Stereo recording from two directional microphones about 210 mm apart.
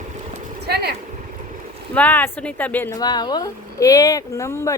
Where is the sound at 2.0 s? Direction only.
10° left (ahead or behind).